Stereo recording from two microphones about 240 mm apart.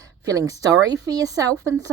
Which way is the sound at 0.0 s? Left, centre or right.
Centre.